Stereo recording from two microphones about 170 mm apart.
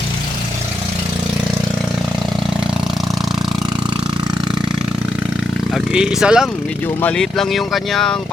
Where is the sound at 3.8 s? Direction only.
25° right (ahead or behind).